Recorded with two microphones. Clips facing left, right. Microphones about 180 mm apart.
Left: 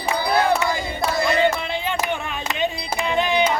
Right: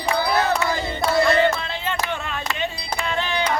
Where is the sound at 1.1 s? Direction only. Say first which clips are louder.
Right 2 dB; 15° left (ahead or behind).